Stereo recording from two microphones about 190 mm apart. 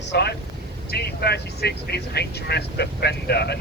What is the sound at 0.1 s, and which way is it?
Vehicle, 60° left (ahead or behind).